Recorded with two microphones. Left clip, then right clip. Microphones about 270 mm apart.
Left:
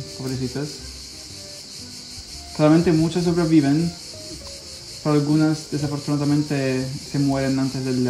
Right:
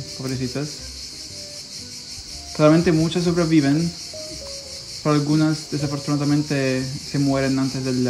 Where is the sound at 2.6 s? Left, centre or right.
Centre.